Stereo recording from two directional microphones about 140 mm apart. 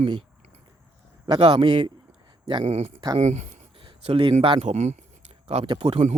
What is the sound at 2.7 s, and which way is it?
Speech, 50° right (ahead or behind).